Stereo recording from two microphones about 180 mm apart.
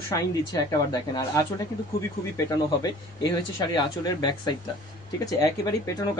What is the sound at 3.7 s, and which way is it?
Speech, 25° left (ahead or behind).